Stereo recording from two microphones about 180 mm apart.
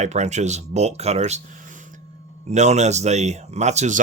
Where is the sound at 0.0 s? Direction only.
40° right (ahead or behind).